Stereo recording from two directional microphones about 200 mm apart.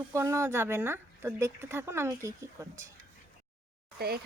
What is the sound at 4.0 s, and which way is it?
Speech, 50° right (ahead or behind).